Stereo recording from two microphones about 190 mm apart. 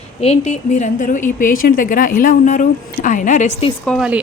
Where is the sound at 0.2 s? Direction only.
35° left (ahead or behind).